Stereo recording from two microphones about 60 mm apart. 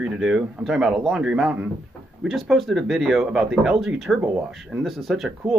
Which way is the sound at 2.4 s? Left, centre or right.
Centre.